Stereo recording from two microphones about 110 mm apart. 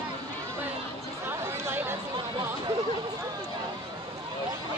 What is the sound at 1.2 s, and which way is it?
Chatter, 20° right (ahead or behind).